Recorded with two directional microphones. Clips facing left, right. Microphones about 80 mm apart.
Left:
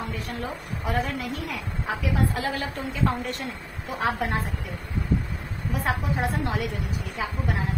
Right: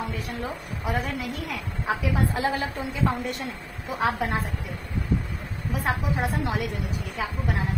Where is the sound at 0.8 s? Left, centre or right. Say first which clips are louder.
Left 1 dB; centre.